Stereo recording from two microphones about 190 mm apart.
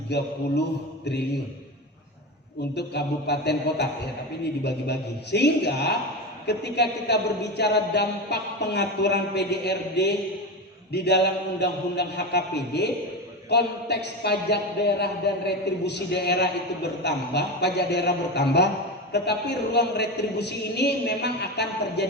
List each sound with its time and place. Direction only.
0.1 s a man's voice: 65° left (ahead or behind)
2.7 s a man's voice: 60° left (ahead or behind)